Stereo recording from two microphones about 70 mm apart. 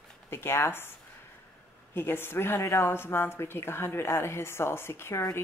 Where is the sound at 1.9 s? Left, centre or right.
Left.